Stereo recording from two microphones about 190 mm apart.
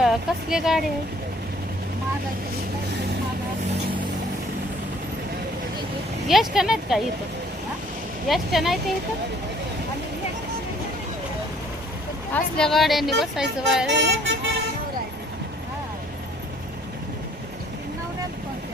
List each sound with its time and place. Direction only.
0.0 s speech: centre (ahead or behind)
6.2 s speech: centre (ahead or behind)
8.3 s speech: centre (ahead or behind)
12.3 s speech: 5° left (ahead or behind)
13.8 s speech: 70° right (ahead or behind)